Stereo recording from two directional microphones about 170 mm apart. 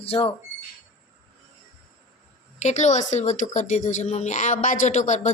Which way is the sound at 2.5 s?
45° left (ahead or behind).